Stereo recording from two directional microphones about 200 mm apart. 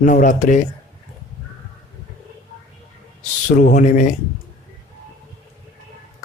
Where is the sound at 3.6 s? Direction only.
40° left (ahead or behind).